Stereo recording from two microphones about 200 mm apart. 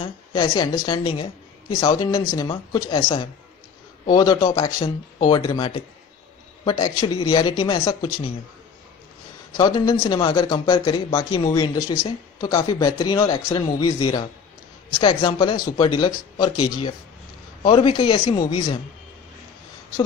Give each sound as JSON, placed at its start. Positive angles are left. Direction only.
{"t": 0.0, "sound": "a woman's voice", "side_deg": 25}
{"t": 4.1, "sound": "speech", "side_deg": 20}
{"t": 9.5, "sound": "speech", "side_deg": 20}